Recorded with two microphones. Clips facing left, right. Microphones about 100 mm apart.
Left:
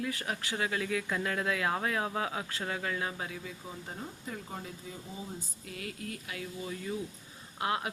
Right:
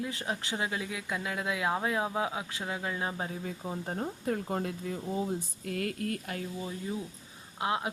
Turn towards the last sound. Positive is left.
turn(degrees=-20)  # may be behind; listen again after turning